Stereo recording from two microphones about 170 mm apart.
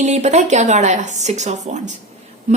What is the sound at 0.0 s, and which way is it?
A woman's voice, 40° right (ahead or behind).